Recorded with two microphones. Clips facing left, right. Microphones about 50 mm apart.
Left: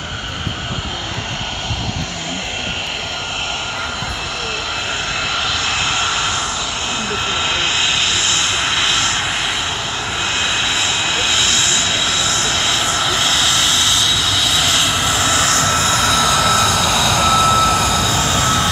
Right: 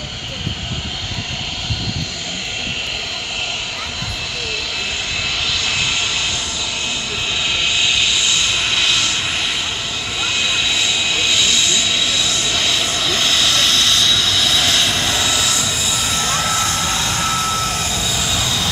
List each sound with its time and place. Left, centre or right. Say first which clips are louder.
5.3 s vehicle: left 1 dB; left
8.5 s vehicle: left 1 dB; left
9.2 s vehicle: left 2 dB; centre
15.2 s vehicle: left 3 dB; left
15.5 s vehicle: left 6 dB; left